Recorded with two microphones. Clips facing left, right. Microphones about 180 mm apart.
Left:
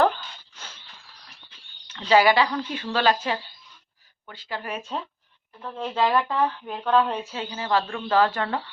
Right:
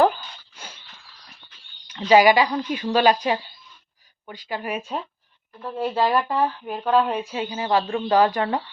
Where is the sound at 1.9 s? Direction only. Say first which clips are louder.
Right 3 dB; 15° right (ahead or behind).